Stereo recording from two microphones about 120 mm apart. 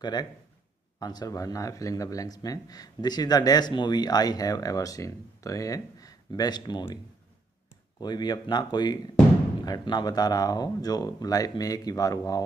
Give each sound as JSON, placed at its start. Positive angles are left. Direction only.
{"t": 0.0, "sound": "speech", "side_deg": 35}
{"t": 8.0, "sound": "speech", "side_deg": 35}